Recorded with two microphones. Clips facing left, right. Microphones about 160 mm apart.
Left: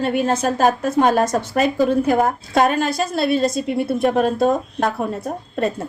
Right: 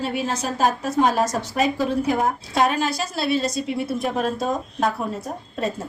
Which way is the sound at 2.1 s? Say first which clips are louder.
Left 4 dB; 50° left (ahead or behind).